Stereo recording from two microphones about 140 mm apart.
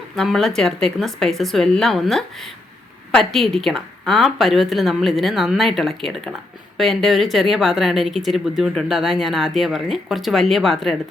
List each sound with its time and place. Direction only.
0.2 s speech: centre (ahead or behind)